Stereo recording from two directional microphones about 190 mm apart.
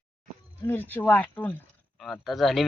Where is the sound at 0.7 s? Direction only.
10° left (ahead or behind).